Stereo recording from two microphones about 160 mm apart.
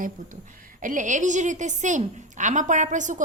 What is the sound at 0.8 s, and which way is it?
A woman's voice, 50° right (ahead or behind).